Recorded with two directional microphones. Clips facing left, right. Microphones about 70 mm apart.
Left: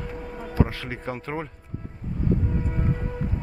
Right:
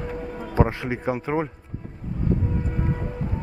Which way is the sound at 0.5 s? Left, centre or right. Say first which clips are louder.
Right 4 dB; right.